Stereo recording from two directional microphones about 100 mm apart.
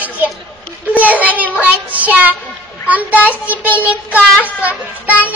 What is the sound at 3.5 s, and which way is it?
Child singing, 15° right (ahead or behind).